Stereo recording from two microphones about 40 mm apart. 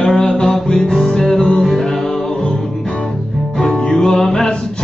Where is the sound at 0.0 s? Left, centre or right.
Centre.